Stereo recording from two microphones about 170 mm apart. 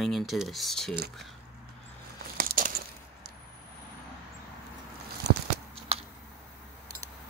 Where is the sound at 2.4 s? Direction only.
55° right (ahead or behind).